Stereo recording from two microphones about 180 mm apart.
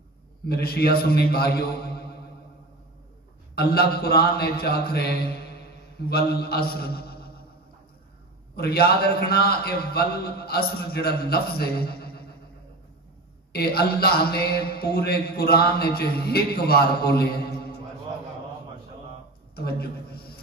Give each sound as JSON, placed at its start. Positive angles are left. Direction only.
{"t": 0.5, "sound": "a man's voice", "side_deg": 60}
{"t": 3.5, "sound": "a man's voice", "side_deg": 60}
{"t": 8.5, "sound": "a man's voice", "side_deg": 60}
{"t": 13.5, "sound": "a man's voice", "side_deg": 60}
{"t": 19.5, "sound": "a man's voice", "side_deg": 60}